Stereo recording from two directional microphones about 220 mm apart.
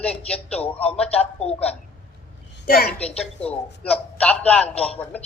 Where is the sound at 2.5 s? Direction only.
40° left (ahead or behind).